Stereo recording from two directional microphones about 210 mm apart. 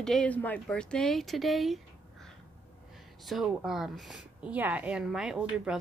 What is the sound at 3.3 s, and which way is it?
A woman's voice, centre (ahead or behind).